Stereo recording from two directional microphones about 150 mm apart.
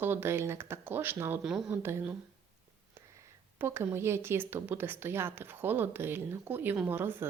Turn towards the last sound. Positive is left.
turn(degrees=-15)  # may be behind; listen again after turning